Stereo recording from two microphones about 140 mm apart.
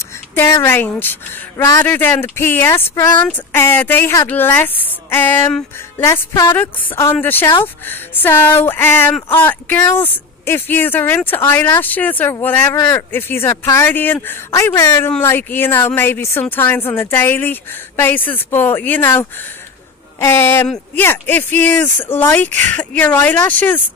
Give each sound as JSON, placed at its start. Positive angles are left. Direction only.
{"t": 0.3, "sound": "speech", "side_deg": 20}